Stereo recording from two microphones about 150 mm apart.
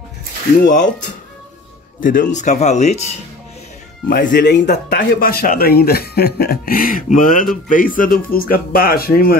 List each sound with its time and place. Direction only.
0.6 s speech: 60° left (ahead or behind)
2.0 s speech: 65° left (ahead or behind)
4.1 s speech: 85° left